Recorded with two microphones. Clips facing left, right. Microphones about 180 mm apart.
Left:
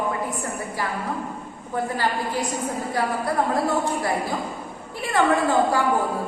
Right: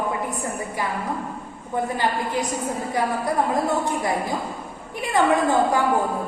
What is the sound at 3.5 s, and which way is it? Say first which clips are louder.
Speech: even; 20° right (ahead or behind).